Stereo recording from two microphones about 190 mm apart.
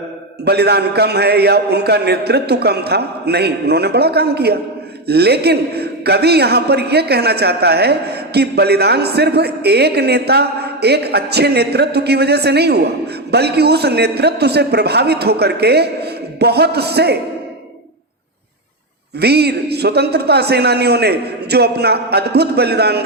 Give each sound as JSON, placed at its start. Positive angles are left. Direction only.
{"t": 0.4, "sound": "a man's voice", "side_deg": -60}
{"t": 19.2, "sound": "a man's voice", "side_deg": -60}